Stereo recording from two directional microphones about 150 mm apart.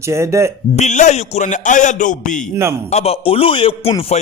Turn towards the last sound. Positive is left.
turn(degrees=35)  # may be behind; listen again after turning